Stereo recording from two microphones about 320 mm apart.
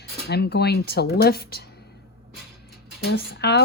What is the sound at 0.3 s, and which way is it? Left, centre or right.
Speech, left.